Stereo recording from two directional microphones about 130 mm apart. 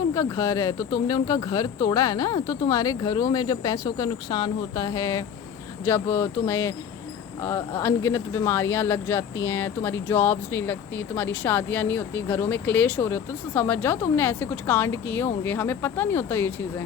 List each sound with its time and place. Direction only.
0.1 s speech: 25° left (ahead or behind)